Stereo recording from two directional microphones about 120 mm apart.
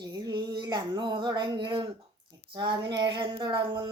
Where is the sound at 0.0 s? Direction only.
35° right (ahead or behind).